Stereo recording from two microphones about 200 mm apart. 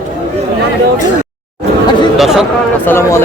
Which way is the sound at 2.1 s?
Centre (ahead or behind).